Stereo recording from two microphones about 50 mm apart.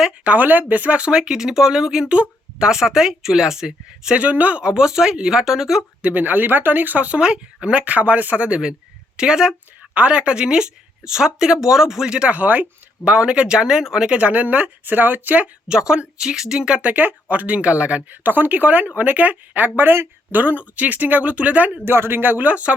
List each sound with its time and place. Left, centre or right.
0.3 s speech: right; by 4.1 s centre
4.1 s speech: right
4.6 s speech: centre
6.0 s speech: right; by 9.6 s centre
9.9 s speech: right
12.3 s speech: right
13.1 s speech: centre
14.1 s speech: right
15.7 s speech: centre
16.8 s speech: right
18.1 s speech: right
21.8 s speech: right